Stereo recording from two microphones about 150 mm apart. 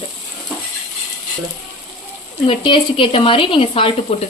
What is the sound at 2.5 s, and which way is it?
Speech, 35° left (ahead or behind).